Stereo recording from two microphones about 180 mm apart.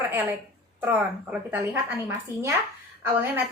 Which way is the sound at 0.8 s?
10° right (ahead or behind).